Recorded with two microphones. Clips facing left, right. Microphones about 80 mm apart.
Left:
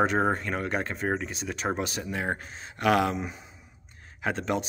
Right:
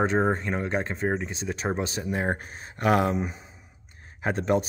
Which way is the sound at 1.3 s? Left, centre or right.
Right.